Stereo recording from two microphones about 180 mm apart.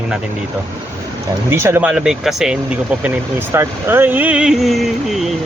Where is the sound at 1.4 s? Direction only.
15° right (ahead or behind).